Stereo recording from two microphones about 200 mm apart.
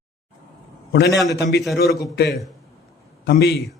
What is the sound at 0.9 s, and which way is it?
A man's voice, 55° left (ahead or behind).